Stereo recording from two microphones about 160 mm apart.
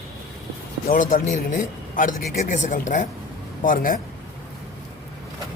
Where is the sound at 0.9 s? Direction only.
55° left (ahead or behind).